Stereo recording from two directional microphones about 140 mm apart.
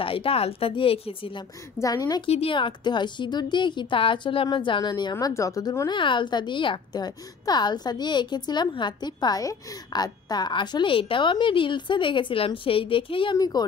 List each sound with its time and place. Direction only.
0.0 s a woman's voice: 40° left (ahead or behind)
1.8 s speech: 25° left (ahead or behind)
2.2 s a woman's voice: 45° left (ahead or behind)
5.1 s a woman's voice: 20° left (ahead or behind)